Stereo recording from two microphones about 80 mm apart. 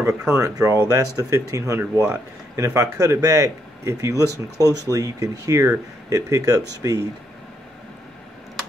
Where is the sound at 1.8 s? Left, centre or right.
Centre.